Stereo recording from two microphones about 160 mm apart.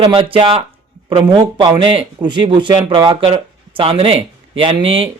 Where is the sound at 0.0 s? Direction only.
35° right (ahead or behind).